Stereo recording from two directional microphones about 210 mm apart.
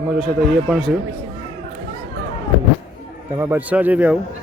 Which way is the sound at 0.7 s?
Centre (ahead or behind).